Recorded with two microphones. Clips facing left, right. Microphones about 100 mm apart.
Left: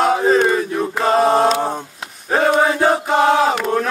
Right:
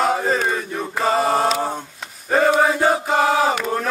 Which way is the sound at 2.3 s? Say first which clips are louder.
Left 1 dB; centre (ahead or behind).